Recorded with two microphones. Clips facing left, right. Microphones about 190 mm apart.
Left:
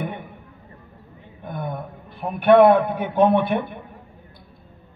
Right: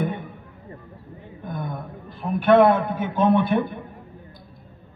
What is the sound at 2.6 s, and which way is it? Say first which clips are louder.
Speech: left 3 dB; 60° left (ahead or behind).